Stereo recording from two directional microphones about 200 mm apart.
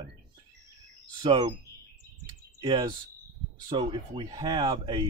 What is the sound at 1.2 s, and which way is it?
Speech, 25° right (ahead or behind).